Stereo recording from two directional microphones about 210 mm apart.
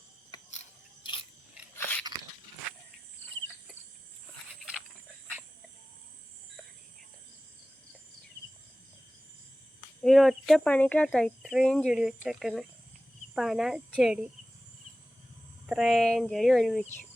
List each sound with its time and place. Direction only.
1.0 s gears: 25° left (ahead or behind)
1.7 s biting: 5° left (ahead or behind)
10.0 s speech: centre (ahead or behind)
15.6 s speech: centre (ahead or behind)